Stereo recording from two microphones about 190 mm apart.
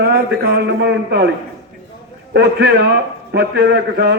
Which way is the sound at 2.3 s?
60° right (ahead or behind).